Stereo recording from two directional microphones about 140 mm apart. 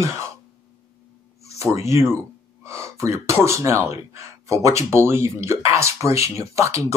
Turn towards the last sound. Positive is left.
turn(degrees=-20)  # may be behind; listen again after turning